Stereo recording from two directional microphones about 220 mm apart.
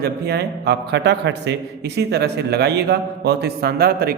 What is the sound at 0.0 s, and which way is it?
A man's voice, 45° right (ahead or behind).